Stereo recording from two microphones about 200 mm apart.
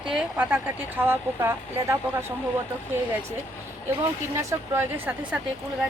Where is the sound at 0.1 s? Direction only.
5° right (ahead or behind).